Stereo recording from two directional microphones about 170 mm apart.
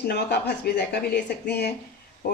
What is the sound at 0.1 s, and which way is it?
A woman's voice, 75° left (ahead or behind).